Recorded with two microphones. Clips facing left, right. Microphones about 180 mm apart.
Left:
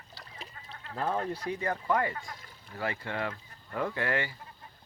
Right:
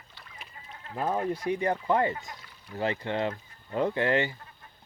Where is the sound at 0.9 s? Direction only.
10° right (ahead or behind).